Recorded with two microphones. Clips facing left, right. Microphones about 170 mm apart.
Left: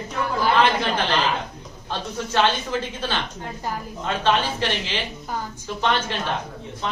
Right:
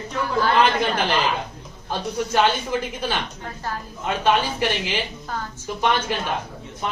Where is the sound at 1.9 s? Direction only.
10° right (ahead or behind).